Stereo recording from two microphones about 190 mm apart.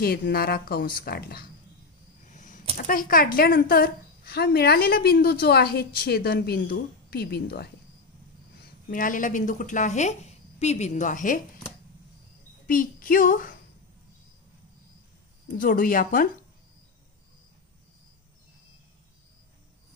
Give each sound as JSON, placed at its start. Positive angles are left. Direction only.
{"t": 0.0, "sound": "a woman's voice", "side_deg": 55}
{"t": 2.2, "sound": "arrow", "side_deg": 40}
{"t": 2.9, "sound": "a woman's voice", "side_deg": 50}
{"t": 8.8, "sound": "a woman's voice", "side_deg": 45}
{"t": 12.6, "sound": "speech", "side_deg": 45}
{"t": 15.5, "sound": "a woman's voice", "side_deg": 45}